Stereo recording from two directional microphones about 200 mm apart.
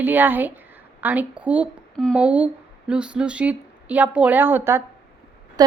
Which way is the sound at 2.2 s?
5° right (ahead or behind).